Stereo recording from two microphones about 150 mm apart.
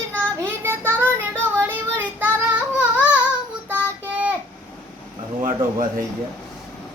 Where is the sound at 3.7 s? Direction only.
10° right (ahead or behind).